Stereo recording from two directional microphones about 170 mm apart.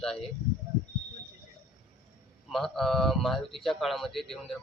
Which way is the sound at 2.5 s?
Centre (ahead or behind).